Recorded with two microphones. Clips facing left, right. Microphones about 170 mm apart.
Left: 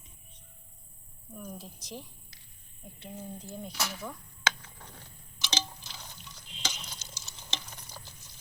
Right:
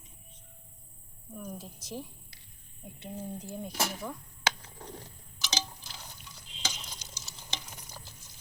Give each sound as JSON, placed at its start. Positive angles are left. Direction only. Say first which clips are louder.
{"t": 1.4, "sound": "speech", "louder": "right 1 dB", "side_deg": -5}
{"t": 3.7, "sound": "speech", "louder": "right 4 dB", "side_deg": -45}
{"t": 4.4, "sound": "mechanisms", "louder": "right 1 dB", "side_deg": -35}
{"t": 5.5, "sound": "a sound", "louder": "left 1 dB", "side_deg": -10}
{"t": 7.5, "sound": "stir", "louder": "left 1 dB", "side_deg": -10}